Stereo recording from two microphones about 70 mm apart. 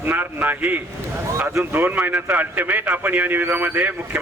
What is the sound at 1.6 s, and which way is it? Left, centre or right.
A man's voice, right.